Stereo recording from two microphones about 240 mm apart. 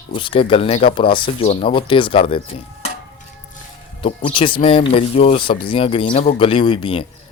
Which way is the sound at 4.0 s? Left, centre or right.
Left.